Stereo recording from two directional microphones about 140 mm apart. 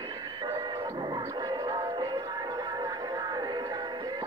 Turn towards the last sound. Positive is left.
turn(degrees=-30)  # may be behind; listen again after turning